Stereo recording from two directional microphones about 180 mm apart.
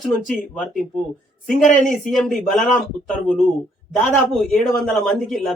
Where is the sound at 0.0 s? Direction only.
5° left (ahead or behind).